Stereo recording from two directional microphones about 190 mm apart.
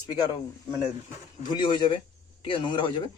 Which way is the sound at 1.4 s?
25° left (ahead or behind).